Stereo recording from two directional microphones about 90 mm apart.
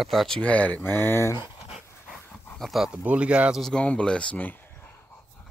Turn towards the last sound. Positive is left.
turn(degrees=20)  # may be behind; listen again after turning